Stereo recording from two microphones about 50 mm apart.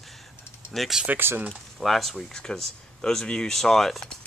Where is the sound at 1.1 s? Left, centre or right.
Right.